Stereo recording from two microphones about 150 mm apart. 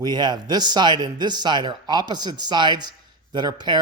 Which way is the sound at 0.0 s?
30° right (ahead or behind).